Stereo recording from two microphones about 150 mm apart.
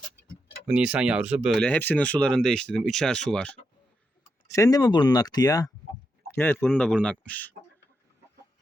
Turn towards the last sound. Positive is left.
turn(degrees=10)  # may be behind; listen again after turning